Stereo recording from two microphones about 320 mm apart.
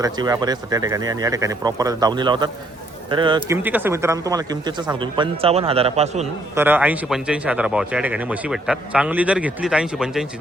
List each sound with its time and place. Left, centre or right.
0.0 s speech: centre
6.6 s speech: centre